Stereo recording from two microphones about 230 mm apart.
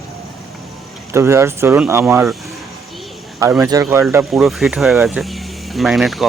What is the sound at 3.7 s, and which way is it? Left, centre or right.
Speech, centre.